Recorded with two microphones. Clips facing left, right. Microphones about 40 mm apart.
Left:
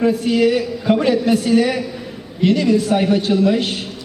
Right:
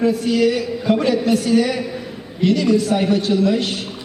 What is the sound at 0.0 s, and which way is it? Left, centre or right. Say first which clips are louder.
A man's voice: left 1 dB; left.